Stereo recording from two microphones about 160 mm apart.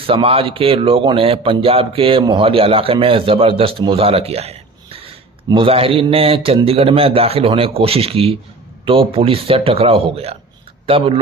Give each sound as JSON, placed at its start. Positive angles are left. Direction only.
{"t": 0.0, "sound": "speech", "side_deg": -35}